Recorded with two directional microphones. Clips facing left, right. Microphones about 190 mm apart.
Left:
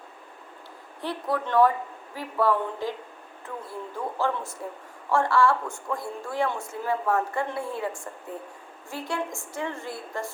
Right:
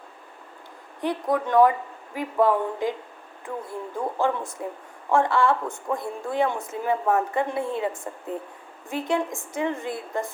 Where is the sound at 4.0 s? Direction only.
15° right (ahead or behind).